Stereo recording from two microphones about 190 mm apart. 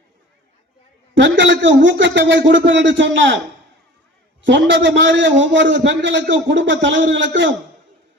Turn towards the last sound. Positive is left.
turn(degrees=-75)  # may be behind; listen again after turning